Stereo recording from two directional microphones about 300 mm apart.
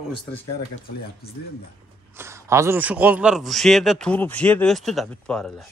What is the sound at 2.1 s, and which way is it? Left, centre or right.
A man's voice, centre.